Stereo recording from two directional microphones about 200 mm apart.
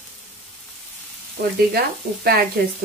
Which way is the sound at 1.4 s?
50° right (ahead or behind).